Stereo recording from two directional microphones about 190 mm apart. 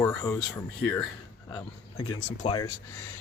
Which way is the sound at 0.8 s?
5° left (ahead or behind).